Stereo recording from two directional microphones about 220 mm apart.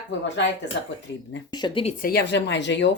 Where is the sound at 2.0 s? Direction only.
45° left (ahead or behind).